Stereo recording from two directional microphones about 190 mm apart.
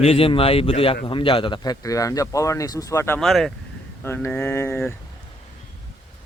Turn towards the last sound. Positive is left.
turn(degrees=15)  # may be behind; listen again after turning